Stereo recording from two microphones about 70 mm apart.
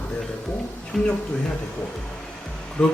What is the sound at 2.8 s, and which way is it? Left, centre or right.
Speech, centre.